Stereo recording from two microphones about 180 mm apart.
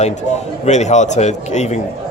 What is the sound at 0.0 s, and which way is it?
Speech, 40° left (ahead or behind).